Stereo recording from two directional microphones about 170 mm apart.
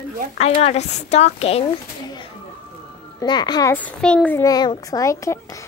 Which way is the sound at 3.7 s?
10° left (ahead or behind).